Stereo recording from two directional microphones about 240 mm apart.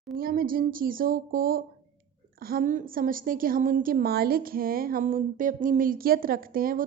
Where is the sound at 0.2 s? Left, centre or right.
Right.